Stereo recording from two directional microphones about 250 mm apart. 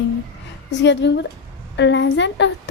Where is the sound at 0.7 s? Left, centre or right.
Left.